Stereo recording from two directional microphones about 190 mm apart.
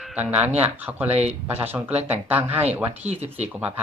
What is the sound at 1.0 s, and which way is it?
Speech, 35° right (ahead or behind).